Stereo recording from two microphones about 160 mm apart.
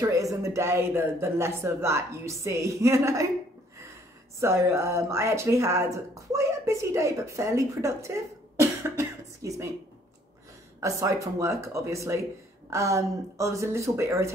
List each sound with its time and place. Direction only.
0.0 s speech: 20° right (ahead or behind)
4.4 s speech: 15° right (ahead or behind)
10.8 s speech: 20° right (ahead or behind)